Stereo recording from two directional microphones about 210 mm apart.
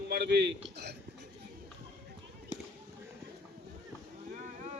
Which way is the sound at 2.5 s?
20° left (ahead or behind).